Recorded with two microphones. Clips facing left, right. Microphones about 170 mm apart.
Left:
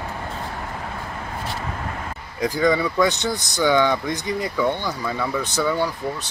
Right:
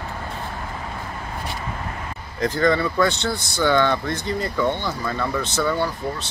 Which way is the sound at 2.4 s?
10° left (ahead or behind).